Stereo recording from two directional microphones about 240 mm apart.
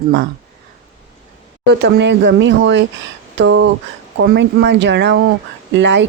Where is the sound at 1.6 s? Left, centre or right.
Right.